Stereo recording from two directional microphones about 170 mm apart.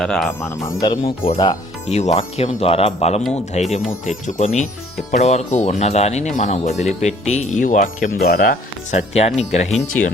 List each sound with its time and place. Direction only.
0.0 s speech: 5° left (ahead or behind)
0.6 s speech: 25° left (ahead or behind)
1.9 s speech: 40° left (ahead or behind); by 8.5 s 60° left (ahead or behind)
8.9 s speech: 40° left (ahead or behind)